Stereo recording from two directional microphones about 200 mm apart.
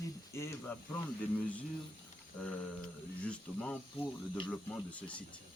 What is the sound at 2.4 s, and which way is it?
Speech, 5° left (ahead or behind).